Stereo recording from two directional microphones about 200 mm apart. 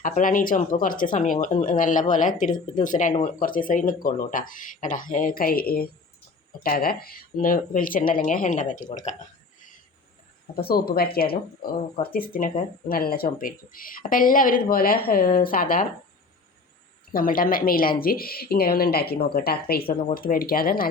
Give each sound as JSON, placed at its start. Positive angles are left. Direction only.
{"t": 0.0, "sound": "speech", "side_deg": 45}
{"t": 10.5, "sound": "speech", "side_deg": 50}
{"t": 17.1, "sound": "speech", "side_deg": 45}